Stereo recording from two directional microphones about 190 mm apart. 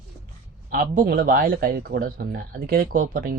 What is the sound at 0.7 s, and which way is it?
Speech, 45° right (ahead or behind).